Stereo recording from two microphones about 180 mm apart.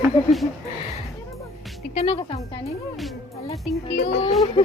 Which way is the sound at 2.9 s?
Centre (ahead or behind).